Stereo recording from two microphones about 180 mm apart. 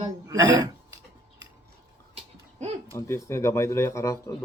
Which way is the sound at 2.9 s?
15° left (ahead or behind).